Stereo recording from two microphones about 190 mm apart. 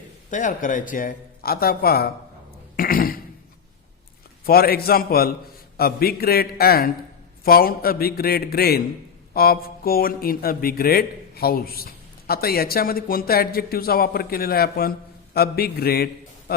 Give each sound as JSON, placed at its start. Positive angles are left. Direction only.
{"t": 0.3, "sound": "speech", "side_deg": 45}
{"t": 2.7, "sound": "throat clearing", "side_deg": 50}
{"t": 4.4, "sound": "speech", "side_deg": 55}